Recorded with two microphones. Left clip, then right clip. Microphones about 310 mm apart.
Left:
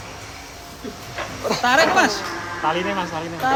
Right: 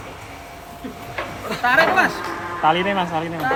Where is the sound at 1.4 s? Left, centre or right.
Centre.